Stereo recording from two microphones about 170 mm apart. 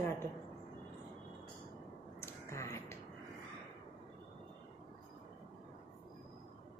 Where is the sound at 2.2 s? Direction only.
15° left (ahead or behind).